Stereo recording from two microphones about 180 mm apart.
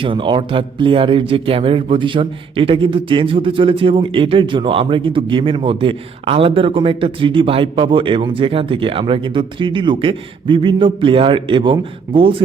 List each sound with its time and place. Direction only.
0.0 s a man's voice: 30° right (ahead or behind)